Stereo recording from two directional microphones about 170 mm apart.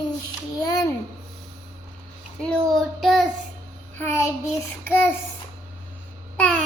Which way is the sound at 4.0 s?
15° left (ahead or behind).